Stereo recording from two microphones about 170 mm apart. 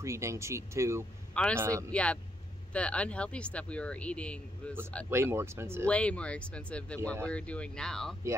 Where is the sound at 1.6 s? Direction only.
15° right (ahead or behind).